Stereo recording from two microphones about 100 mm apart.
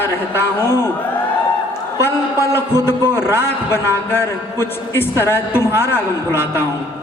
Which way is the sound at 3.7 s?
25° left (ahead or behind).